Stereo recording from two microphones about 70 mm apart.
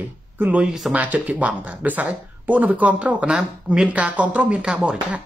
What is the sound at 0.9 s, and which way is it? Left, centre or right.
Speech, right.